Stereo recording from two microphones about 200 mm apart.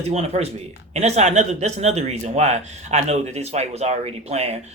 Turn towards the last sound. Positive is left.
turn(degrees=-35)  # may be behind; listen again after turning